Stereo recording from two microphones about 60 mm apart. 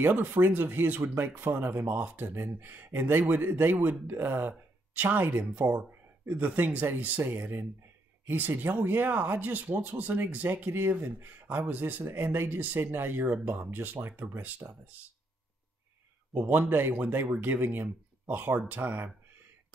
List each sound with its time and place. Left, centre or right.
0.0 s speech: right
16.4 s speech: right